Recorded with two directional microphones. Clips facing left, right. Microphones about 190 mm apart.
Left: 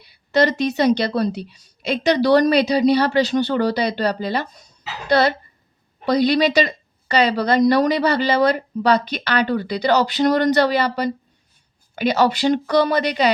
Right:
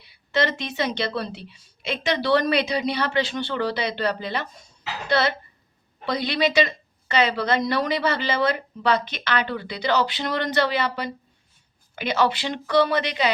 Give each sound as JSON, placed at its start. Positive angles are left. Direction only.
{"t": 0.0, "sound": "speech", "side_deg": 40}